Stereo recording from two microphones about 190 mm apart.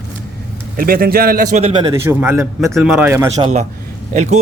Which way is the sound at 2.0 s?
10° right (ahead or behind).